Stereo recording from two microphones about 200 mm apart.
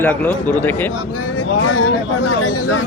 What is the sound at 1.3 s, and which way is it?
Speech, 90° left.